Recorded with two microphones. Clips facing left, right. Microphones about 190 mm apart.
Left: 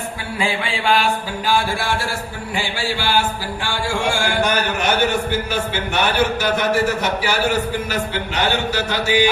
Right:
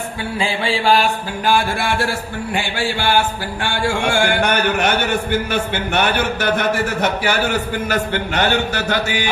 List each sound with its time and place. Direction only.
0.3 s mantra: 30° right (ahead or behind)
1.5 s a man's voice: 55° right (ahead or behind)